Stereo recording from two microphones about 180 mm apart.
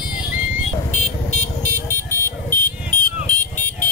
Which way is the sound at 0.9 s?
5° left (ahead or behind).